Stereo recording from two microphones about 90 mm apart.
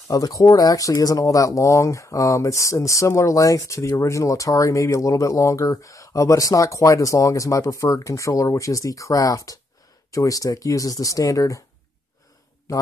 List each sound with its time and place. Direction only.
0.1 s speech: 40° left (ahead or behind)